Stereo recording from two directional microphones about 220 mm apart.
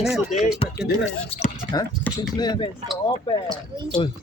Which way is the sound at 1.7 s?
20° left (ahead or behind).